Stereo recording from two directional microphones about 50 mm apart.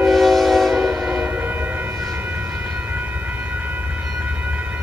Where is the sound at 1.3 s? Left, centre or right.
Right.